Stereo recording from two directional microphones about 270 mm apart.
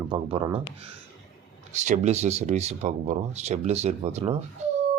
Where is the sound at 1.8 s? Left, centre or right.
Right.